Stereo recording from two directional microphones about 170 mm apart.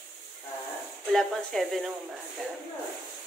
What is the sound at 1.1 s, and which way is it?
Speech, centre (ahead or behind).